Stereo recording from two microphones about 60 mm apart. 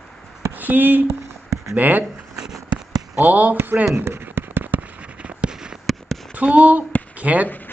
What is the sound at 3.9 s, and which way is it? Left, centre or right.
Fireworks, right.